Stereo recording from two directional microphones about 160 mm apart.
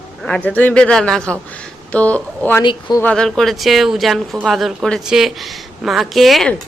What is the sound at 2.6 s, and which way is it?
Speech, 25° left (ahead or behind).